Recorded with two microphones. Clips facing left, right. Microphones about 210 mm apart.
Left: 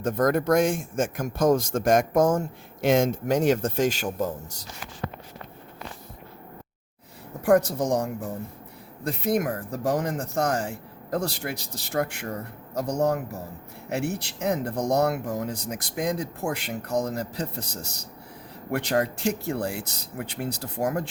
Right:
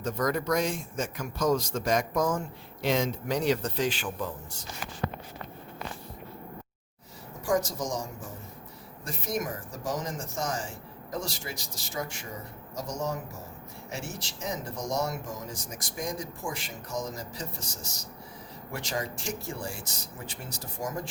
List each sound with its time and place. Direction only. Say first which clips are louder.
0.0 s speech: left 6 dB; 50° left (ahead or behind)
7.4 s speech: left 8 dB; 60° left (ahead or behind)